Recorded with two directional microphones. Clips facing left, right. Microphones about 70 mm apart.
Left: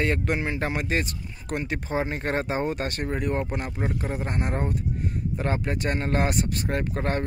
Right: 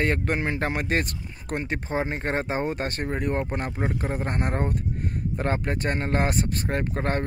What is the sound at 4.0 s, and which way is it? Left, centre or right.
Speech, right.